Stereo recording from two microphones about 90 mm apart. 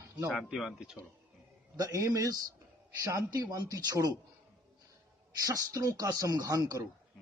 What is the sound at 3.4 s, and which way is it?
Speech, 45° right (ahead or behind).